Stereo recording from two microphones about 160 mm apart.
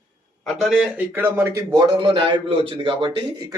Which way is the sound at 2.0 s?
30° right (ahead or behind).